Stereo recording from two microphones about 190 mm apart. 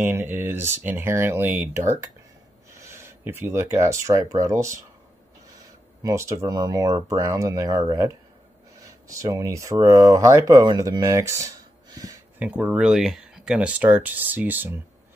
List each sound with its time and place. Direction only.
0.0 s speech: 10° right (ahead or behind)
6.0 s speech: 15° right (ahead or behind)